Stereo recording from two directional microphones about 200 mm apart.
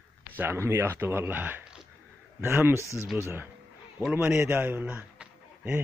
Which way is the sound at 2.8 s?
15° left (ahead or behind).